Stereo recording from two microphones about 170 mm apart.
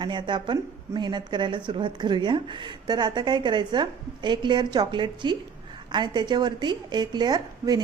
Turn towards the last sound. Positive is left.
turn(degrees=-25)  # may be behind; listen again after turning